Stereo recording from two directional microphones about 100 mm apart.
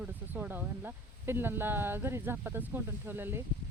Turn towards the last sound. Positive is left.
turn(degrees=-20)  # may be behind; listen again after turning